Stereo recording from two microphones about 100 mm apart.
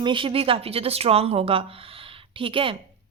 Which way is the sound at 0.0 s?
55° right (ahead or behind).